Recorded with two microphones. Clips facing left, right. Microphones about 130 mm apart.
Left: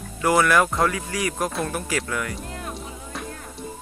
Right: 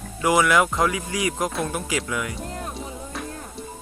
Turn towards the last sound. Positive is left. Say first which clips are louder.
# right 1 dB
turn(degrees=0)  # may be behind; listen again after turning